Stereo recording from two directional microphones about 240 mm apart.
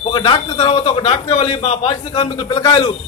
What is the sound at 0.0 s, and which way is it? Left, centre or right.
A man's voice, left.